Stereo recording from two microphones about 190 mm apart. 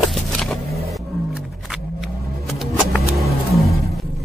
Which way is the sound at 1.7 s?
Centre (ahead or behind).